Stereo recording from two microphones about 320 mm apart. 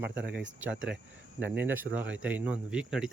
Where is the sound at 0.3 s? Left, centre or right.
Right.